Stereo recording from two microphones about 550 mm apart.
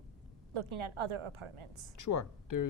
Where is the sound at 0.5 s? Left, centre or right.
Right.